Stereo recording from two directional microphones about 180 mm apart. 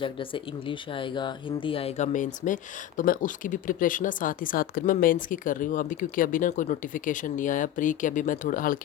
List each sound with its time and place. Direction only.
0.0 s speech: 30° left (ahead or behind); by 8.8 s 50° left (ahead or behind)